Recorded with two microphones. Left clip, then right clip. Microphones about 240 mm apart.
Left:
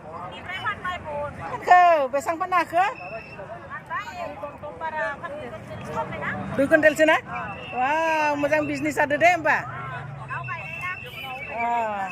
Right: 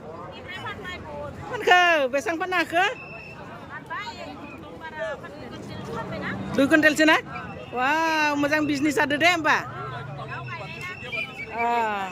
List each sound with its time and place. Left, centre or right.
0.5 s vehicle: centre
1.5 s speech: centre
4.8 s speech: left
6.6 s speech: centre
10.3 s vehicle: centre
11.5 s speech: centre